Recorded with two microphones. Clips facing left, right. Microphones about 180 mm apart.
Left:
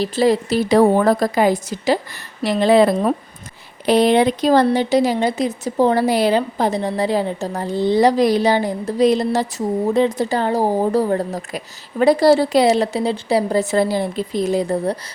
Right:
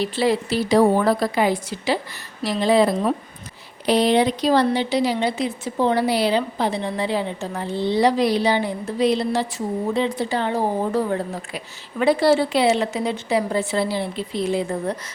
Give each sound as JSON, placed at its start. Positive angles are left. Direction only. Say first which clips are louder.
{"t": 0.0, "sound": "a woman's voice", "louder": "left 4 dB", "side_deg": 40}
{"t": 2.4, "sound": "a woman's voice", "louder": "left 4 dB", "side_deg": 60}